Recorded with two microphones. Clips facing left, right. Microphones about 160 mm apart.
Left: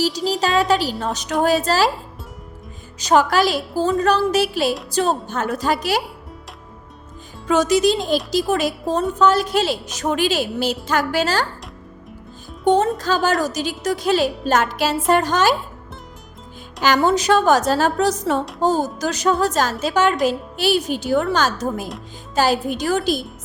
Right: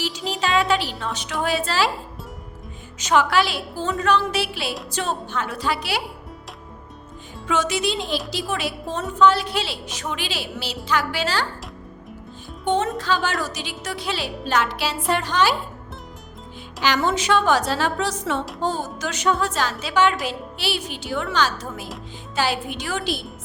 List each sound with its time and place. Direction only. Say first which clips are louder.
0.3 s a woman's voice: left 2 dB; 40° left (ahead or behind)
3.0 s a woman's voice: left 3 dB; 40° left (ahead or behind)
7.4 s a woman's voice: left 7 dB; 40° left (ahead or behind)
12.6 s speech: left 5 dB; 40° left (ahead or behind)
16.8 s a woman's voice: left 5 dB; 40° left (ahead or behind)